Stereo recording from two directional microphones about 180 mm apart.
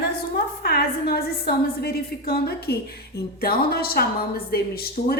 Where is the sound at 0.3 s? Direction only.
65° left (ahead or behind).